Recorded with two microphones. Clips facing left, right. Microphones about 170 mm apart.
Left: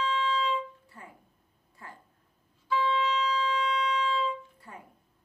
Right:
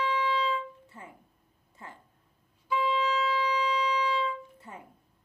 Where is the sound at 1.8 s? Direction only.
20° right (ahead or behind).